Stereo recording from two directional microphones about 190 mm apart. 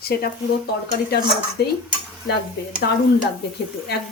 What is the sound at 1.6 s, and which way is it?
Speech, 60° left (ahead or behind).